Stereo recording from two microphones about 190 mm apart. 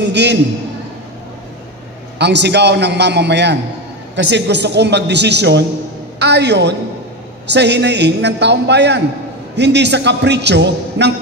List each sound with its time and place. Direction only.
0.1 s a man's voice: 65° right (ahead or behind)
2.1 s a man's voice: 65° right (ahead or behind)